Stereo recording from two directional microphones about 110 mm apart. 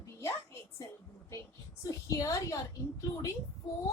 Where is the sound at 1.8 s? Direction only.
30° left (ahead or behind).